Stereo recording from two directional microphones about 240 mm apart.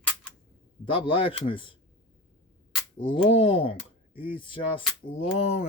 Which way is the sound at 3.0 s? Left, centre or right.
Left.